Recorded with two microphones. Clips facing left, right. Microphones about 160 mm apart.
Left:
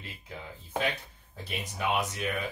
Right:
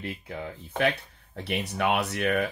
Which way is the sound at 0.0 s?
65° right (ahead or behind).